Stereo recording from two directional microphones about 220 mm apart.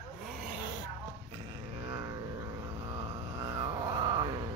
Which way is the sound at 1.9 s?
15° right (ahead or behind).